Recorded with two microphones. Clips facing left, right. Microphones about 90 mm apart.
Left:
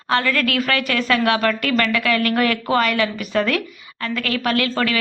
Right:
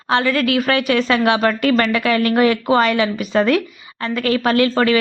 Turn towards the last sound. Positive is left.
turn(degrees=-25)  # may be behind; listen again after turning